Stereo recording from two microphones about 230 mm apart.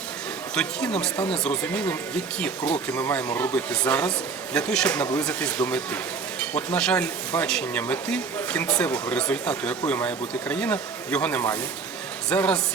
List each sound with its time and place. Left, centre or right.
0.5 s speech: centre